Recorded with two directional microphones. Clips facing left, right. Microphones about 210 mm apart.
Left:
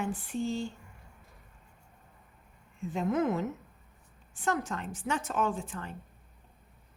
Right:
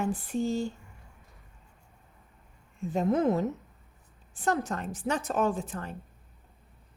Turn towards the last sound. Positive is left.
turn(degrees=-40)  # may be behind; listen again after turning